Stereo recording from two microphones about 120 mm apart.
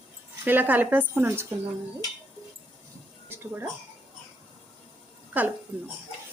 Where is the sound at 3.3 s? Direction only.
20° right (ahead or behind).